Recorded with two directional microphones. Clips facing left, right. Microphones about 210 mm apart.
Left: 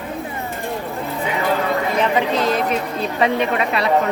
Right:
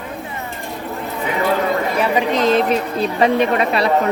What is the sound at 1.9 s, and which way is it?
Speech, 10° right (ahead or behind).